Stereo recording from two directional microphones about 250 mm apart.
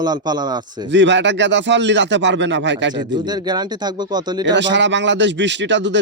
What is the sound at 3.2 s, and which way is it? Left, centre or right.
Speech, centre.